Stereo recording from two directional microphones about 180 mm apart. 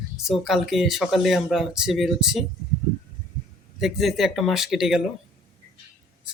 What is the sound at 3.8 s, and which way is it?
Speech, centre (ahead or behind).